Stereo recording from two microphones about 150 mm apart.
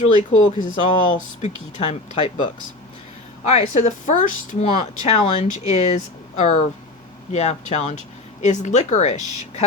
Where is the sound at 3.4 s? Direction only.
50° left (ahead or behind).